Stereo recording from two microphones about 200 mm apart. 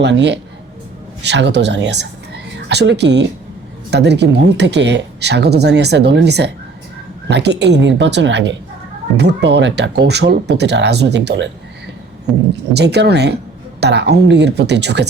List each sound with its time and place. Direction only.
0.0 s speech: 60° right (ahead or behind)
12.7 s speech: 55° right (ahead or behind)